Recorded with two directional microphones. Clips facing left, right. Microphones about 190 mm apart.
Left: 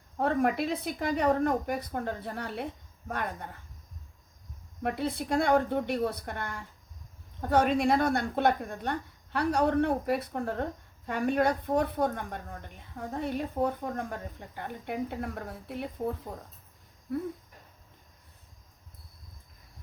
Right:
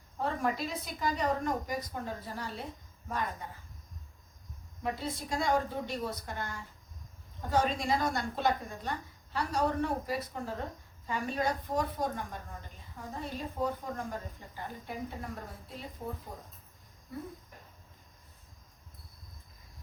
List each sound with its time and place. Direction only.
0.2 s a woman's voice: 60° left (ahead or behind)
4.8 s a woman's voice: 60° left (ahead or behind)